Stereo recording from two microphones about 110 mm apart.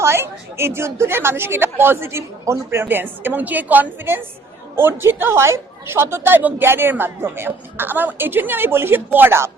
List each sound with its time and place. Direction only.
0.0 s a man's voice: 20° right (ahead or behind)